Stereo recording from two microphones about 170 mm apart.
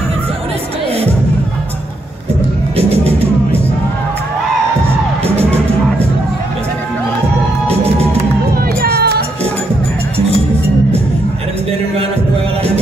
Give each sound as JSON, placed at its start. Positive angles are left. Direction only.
{"t": 2.9, "sound": "music", "side_deg": -35}
{"t": 8.8, "sound": "music", "side_deg": -70}